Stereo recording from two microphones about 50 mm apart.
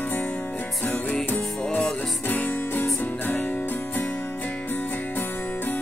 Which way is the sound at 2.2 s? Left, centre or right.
Left.